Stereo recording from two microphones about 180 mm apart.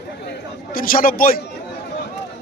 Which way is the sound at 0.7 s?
50° left (ahead or behind).